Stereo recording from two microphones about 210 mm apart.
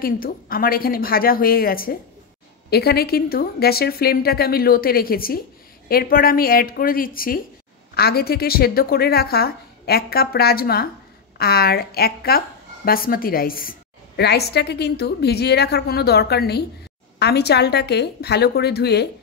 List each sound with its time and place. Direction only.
0.0 s a woman's voice: 45° left (ahead or behind)